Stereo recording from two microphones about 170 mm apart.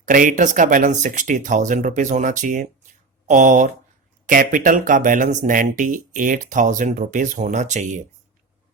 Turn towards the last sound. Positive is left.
turn(degrees=-45)  # may be behind; listen again after turning